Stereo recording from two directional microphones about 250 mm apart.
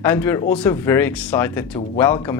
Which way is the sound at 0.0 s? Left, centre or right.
Centre.